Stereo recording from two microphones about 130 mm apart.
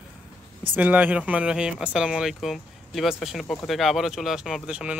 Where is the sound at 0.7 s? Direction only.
10° right (ahead or behind).